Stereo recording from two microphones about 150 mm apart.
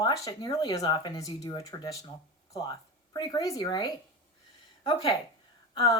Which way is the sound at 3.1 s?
25° left (ahead or behind).